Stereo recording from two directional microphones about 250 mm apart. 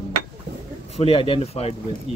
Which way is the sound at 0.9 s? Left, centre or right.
Left.